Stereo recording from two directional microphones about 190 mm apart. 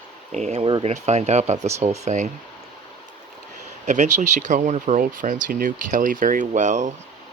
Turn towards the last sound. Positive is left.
turn(degrees=-40)  # may be behind; listen again after turning